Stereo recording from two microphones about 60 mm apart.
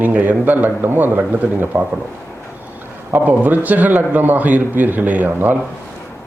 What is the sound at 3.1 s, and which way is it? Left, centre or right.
Speech, right.